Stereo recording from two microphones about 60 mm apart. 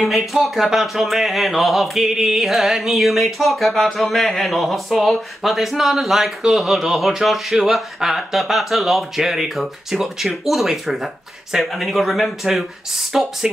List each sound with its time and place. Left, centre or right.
0.0 s speech: centre